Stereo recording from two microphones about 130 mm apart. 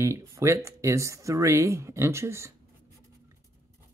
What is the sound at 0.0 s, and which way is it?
Speech, 20° right (ahead or behind).